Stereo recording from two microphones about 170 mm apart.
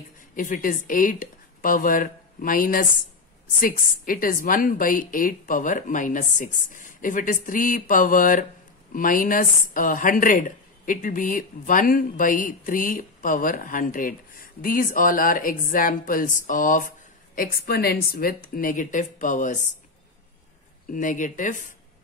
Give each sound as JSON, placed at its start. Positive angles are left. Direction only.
{"t": 0.4, "sound": "speech", "side_deg": 55}
{"t": 17.4, "sound": "speech", "side_deg": 65}
{"t": 20.9, "sound": "speech", "side_deg": 50}